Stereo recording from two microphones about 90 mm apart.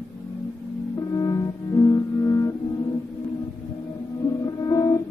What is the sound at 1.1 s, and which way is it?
Music, 35° left (ahead or behind).